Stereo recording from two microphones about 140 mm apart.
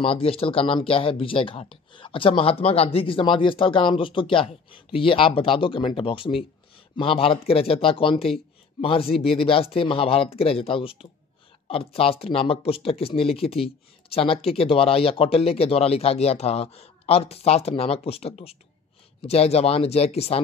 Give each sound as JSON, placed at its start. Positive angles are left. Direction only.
{"t": 0.0, "sound": "speech", "side_deg": 40}